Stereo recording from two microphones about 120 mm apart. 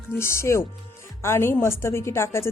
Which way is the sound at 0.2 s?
20° left (ahead or behind).